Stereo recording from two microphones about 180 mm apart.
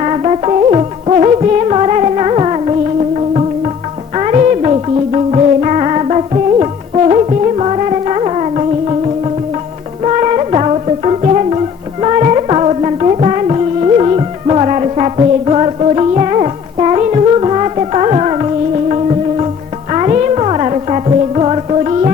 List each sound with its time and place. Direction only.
0.0 s music: 35° right (ahead or behind)